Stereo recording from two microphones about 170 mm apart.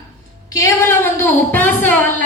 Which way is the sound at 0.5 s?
15° left (ahead or behind).